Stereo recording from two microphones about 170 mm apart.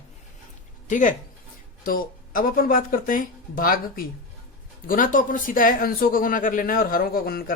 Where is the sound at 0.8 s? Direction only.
50° left (ahead or behind).